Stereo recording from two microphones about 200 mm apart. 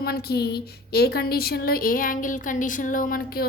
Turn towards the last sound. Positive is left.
turn(degrees=45)  # may be behind; listen again after turning